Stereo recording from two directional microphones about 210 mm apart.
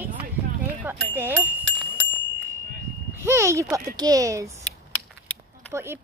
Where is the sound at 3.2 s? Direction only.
15° right (ahead or behind).